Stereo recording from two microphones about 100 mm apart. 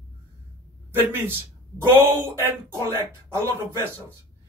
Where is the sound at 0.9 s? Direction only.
20° right (ahead or behind).